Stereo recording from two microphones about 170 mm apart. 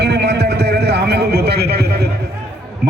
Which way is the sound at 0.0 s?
75° right (ahead or behind).